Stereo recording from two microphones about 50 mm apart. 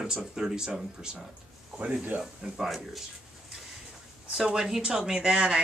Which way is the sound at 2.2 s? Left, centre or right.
Centre.